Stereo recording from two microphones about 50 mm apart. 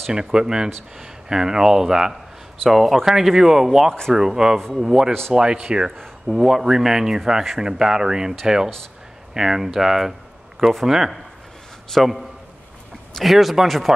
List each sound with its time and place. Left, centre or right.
0.1 s speech: centre